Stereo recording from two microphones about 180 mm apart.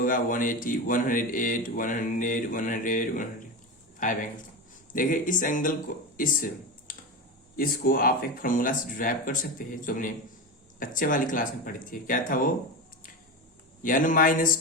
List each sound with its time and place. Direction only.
0.0 s a man's voice: 50° left (ahead or behind)
13.8 s a man's voice: 50° left (ahead or behind)